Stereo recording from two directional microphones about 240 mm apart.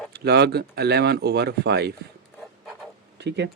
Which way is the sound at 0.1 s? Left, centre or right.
Right.